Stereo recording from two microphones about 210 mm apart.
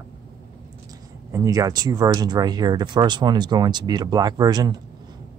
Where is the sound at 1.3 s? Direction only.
15° right (ahead or behind).